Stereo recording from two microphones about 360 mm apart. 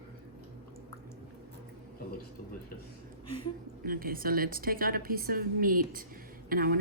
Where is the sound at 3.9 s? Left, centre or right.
Right.